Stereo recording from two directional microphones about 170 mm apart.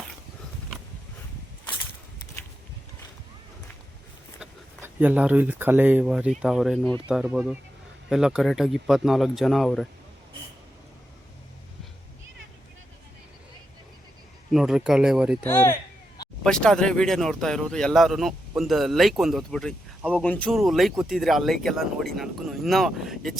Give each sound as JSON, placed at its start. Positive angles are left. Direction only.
{"t": 4.4, "sound": "speech", "side_deg": -10}
{"t": 14.5, "sound": "speech", "side_deg": -5}
{"t": 15.4, "sound": "speech", "side_deg": 15}
{"t": 16.4, "sound": "speech", "side_deg": 5}